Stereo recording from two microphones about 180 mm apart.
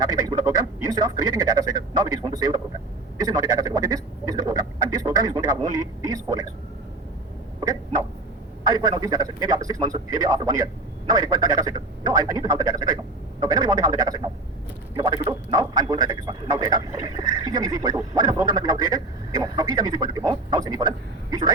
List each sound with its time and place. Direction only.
0.3 s speech: 20° right (ahead or behind)
8.7 s speech: 20° right (ahead or behind)